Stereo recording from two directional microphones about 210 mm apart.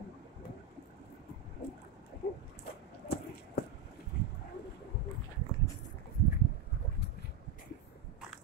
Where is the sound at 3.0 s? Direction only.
50° left (ahead or behind).